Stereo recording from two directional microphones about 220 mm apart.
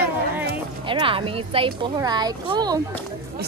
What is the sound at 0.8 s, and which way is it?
Speech, 25° right (ahead or behind).